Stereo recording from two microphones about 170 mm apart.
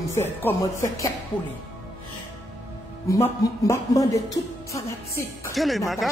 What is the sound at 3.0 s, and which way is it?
Speech, 20° left (ahead or behind).